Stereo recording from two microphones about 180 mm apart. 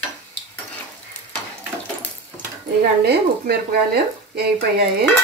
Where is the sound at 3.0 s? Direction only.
60° right (ahead or behind).